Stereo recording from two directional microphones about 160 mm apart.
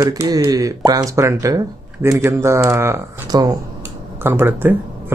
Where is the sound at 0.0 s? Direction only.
25° right (ahead or behind).